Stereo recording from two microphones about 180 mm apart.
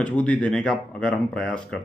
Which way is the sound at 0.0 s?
5° left (ahead or behind).